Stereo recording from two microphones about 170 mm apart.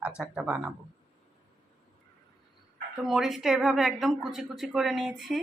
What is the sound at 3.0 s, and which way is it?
Speech, centre (ahead or behind).